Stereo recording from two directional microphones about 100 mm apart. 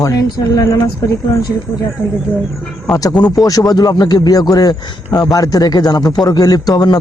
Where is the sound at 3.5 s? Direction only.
40° left (ahead or behind).